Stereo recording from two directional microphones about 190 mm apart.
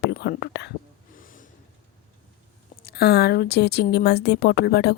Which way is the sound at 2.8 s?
55° left (ahead or behind).